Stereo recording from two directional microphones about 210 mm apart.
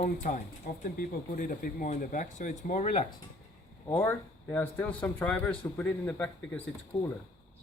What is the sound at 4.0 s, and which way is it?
Speech, 10° left (ahead or behind).